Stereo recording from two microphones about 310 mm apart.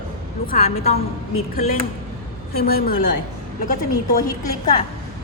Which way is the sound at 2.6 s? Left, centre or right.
Left.